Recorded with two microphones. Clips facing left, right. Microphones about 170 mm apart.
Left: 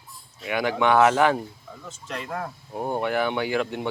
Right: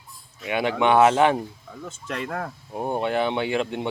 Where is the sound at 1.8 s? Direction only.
55° right (ahead or behind).